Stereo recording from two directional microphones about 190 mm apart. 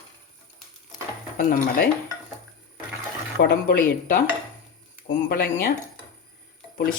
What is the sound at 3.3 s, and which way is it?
Speech, 55° left (ahead or behind).